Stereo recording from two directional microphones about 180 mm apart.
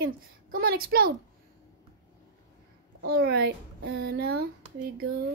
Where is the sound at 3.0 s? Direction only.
60° right (ahead or behind).